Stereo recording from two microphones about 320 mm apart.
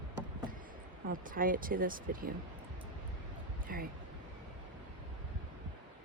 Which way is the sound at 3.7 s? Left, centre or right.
Right.